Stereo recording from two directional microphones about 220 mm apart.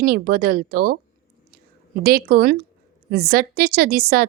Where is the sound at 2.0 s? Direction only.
45° right (ahead or behind).